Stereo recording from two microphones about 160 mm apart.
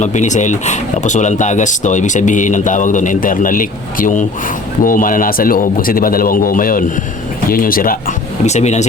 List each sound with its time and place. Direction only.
0.0 s a man's voice: 50° left (ahead or behind)
8.4 s speech: 45° left (ahead or behind)